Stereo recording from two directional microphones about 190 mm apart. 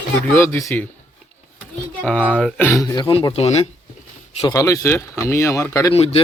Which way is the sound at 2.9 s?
25° left (ahead or behind).